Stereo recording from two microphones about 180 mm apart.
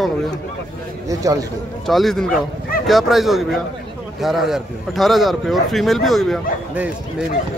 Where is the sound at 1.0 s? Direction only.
20° right (ahead or behind).